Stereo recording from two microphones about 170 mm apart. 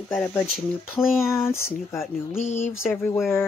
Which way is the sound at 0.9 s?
15° left (ahead or behind).